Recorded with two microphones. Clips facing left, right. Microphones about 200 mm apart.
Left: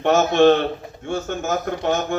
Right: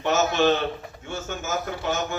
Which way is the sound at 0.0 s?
55° left (ahead or behind).